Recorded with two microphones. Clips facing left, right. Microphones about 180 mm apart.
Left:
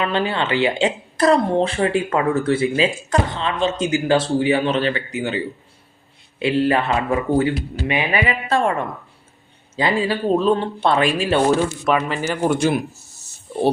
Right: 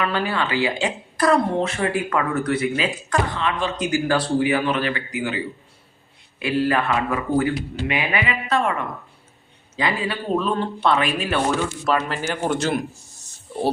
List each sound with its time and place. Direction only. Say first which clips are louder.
0.0 s speech: left 2 dB; 25° left (ahead or behind)
6.4 s speech: left 3 dB; 25° left (ahead or behind)
9.7 s speech: left 4 dB; 30° left (ahead or behind)
11.9 s speech: even; centre (ahead or behind)